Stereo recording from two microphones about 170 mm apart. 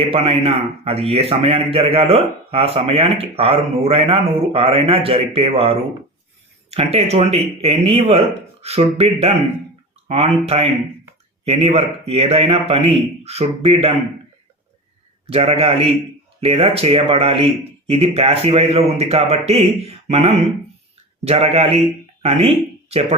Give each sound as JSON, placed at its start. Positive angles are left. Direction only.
{"t": 0.1, "sound": "a man's voice", "side_deg": -35}
{"t": 10.1, "sound": "a man's voice", "side_deg": -35}
{"t": 15.3, "sound": "a man's voice", "side_deg": -35}